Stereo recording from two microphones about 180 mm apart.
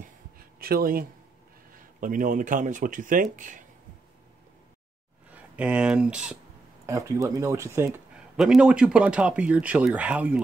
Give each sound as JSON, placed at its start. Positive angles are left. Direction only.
{"t": 0.4, "sound": "a sound", "side_deg": -55}
{"t": 1.7, "sound": "speech", "side_deg": -50}
{"t": 5.3, "sound": "speech", "side_deg": -5}
{"t": 6.9, "sound": "speech", "side_deg": -15}
{"t": 8.4, "sound": "speech", "side_deg": -5}